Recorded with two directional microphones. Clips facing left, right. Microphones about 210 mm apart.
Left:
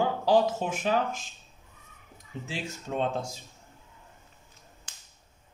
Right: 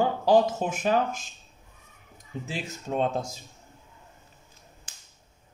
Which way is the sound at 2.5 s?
40° right (ahead or behind).